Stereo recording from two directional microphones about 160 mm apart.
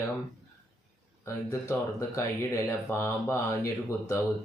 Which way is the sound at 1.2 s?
20° left (ahead or behind).